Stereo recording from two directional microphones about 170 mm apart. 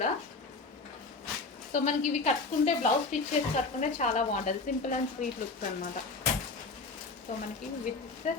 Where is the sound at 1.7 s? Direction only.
45° left (ahead or behind).